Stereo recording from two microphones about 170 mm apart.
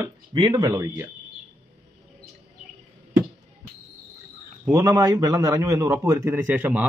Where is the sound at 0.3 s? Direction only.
25° right (ahead or behind).